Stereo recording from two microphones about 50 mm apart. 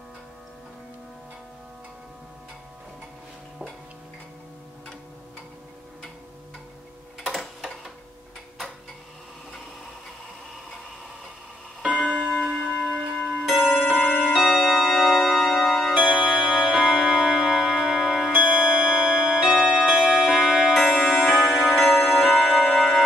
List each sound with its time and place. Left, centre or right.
7.2 s a sound: centre
11.8 s clock: centre
12.1 s clock: centre
12.7 s a sound: centre
13.5 s a sound: centre
13.9 s music: left
14.2 s music: centre
18.3 s music: centre
20.7 s music: centre
22.7 s tick-tock: centre